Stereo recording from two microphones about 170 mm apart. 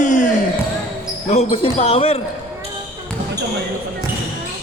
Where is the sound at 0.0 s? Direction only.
45° left (ahead or behind).